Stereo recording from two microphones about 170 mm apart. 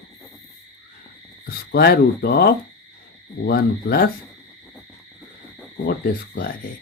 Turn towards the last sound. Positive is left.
turn(degrees=70)  # may be behind; listen again after turning